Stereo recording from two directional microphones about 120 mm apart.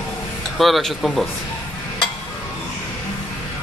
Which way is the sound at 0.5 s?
Centre (ahead or behind).